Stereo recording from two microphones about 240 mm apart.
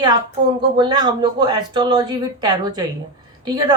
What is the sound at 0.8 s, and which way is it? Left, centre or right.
Speech, centre.